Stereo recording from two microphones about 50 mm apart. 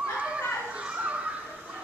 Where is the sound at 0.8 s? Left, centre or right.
Right.